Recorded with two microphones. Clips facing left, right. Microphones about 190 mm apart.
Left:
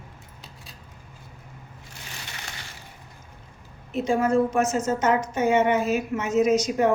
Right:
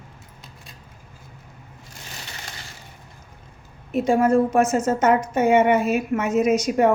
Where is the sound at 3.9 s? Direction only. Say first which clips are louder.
Right 4 dB; 55° right (ahead or behind).